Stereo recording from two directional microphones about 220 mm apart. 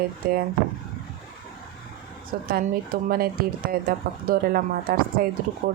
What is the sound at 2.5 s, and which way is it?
Speech, 40° right (ahead or behind).